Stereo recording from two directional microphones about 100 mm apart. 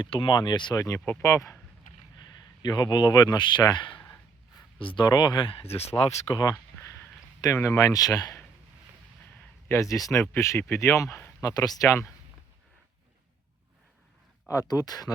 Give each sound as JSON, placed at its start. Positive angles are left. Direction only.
{"t": 0.0, "sound": "a man's voice", "side_deg": 55}
{"t": 0.8, "sound": "speech", "side_deg": 35}
{"t": 2.6, "sound": "a man's voice", "side_deg": 45}
{"t": 6.3, "sound": "a man's voice", "side_deg": 45}
{"t": 7.4, "sound": "speech", "side_deg": 30}
{"t": 9.6, "sound": "speech", "side_deg": 30}
{"t": 11.4, "sound": "speech", "side_deg": 40}
{"t": 14.7, "sound": "speech", "side_deg": 40}